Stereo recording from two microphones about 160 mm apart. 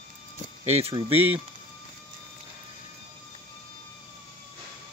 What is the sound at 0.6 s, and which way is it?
Speech, 40° right (ahead or behind).